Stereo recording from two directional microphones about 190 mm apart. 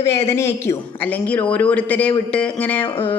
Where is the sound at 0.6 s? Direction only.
10° left (ahead or behind).